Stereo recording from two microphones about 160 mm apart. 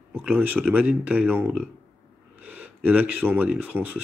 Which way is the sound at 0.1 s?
10° right (ahead or behind).